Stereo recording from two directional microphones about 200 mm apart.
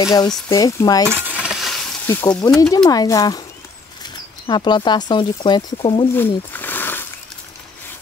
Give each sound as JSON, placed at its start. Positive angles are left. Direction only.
{"t": 0.0, "sound": "speech", "side_deg": 20}
{"t": 1.0, "sound": "stir", "side_deg": -10}
{"t": 2.0, "sound": "speech", "side_deg": 15}
{"t": 6.1, "sound": "a sound", "side_deg": 10}